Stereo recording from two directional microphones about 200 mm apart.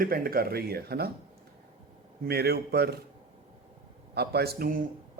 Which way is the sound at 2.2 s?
55° right (ahead or behind).